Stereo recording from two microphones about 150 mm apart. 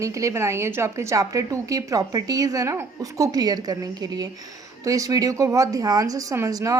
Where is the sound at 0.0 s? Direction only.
20° right (ahead or behind).